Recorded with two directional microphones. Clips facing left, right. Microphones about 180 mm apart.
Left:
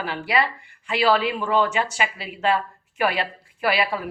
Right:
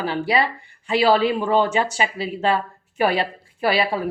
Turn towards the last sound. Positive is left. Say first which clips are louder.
# right 2 dB
turn(degrees=-30)  # may be behind; listen again after turning